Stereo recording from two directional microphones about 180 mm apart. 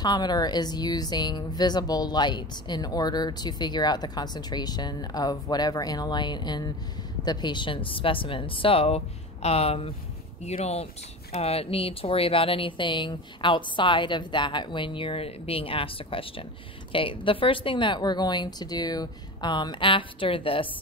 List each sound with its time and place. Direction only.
0.0 s speech: 25° left (ahead or behind)